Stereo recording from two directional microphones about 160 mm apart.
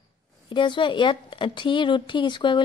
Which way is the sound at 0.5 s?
30° left (ahead or behind).